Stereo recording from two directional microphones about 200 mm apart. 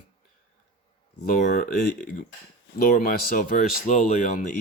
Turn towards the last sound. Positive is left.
turn(degrees=40)  # may be behind; listen again after turning